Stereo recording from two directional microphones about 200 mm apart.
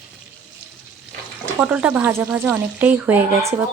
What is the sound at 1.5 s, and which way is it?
Speech, 5° right (ahead or behind).